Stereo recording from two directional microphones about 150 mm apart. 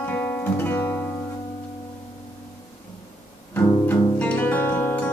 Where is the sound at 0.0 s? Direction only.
10° left (ahead or behind).